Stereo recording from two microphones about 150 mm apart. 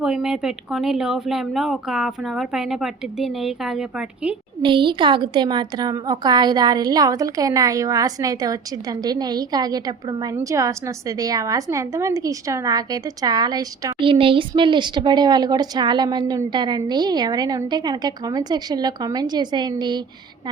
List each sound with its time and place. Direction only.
0.0 s speech: 5° right (ahead or behind)
4.6 s a woman's voice: 30° right (ahead or behind)